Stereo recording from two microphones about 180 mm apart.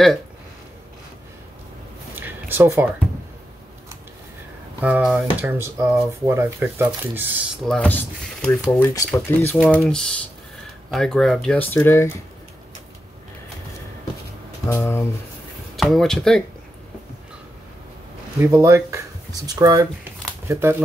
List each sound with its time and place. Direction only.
2.1 s a sound: 10° right (ahead or behind)
4.8 s speech: 10° right (ahead or behind)
7.6 s speech: 5° left (ahead or behind)
14.7 s speech: 15° left (ahead or behind)
15.7 s speech: centre (ahead or behind)
18.4 s speech: 15° right (ahead or behind)